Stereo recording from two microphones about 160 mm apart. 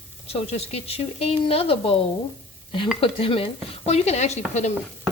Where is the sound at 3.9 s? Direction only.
40° left (ahead or behind).